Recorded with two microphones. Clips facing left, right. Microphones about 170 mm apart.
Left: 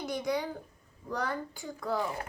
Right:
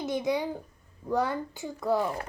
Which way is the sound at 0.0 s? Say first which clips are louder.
Right 4 dB; 20° right (ahead or behind).